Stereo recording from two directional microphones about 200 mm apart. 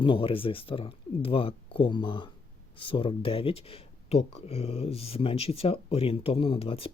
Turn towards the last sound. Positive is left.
turn(degrees=30)  # may be behind; listen again after turning